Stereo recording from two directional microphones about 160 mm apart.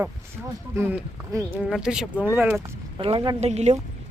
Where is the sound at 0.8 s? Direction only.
15° right (ahead or behind).